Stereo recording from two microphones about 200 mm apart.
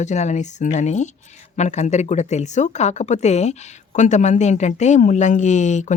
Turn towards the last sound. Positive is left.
turn(degrees=35)  # may be behind; listen again after turning